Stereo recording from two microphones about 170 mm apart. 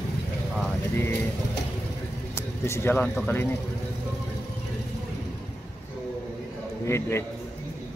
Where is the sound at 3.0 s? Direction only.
5° left (ahead or behind).